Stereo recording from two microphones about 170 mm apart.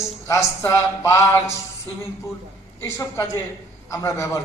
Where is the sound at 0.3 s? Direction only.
15° left (ahead or behind).